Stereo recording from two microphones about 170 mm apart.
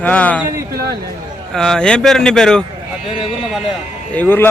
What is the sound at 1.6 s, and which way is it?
A man's voice, 5° left (ahead or behind).